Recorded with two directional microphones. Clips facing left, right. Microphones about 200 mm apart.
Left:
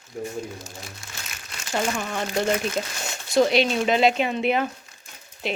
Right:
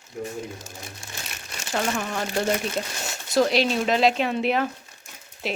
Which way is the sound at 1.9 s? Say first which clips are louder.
Even; centre (ahead or behind).